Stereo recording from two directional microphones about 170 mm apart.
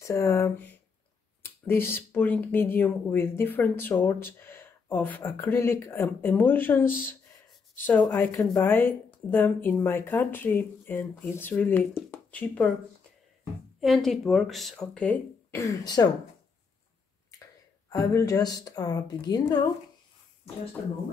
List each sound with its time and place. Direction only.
0.0 s speech: 15° left (ahead or behind)
13.7 s speech: centre (ahead or behind)
15.5 s a woman's voice: 20° left (ahead or behind)
17.8 s a woman's voice: 20° left (ahead or behind)